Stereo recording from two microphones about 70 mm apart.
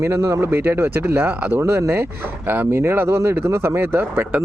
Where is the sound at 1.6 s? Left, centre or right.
Right.